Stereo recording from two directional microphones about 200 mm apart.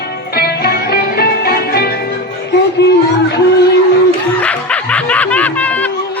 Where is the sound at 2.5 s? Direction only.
55° left (ahead or behind).